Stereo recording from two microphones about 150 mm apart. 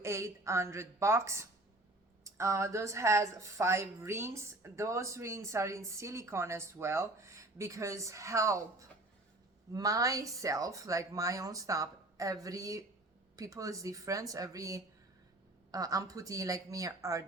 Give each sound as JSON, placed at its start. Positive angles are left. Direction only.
{"t": 0.0, "sound": "a woman's voice", "side_deg": -20}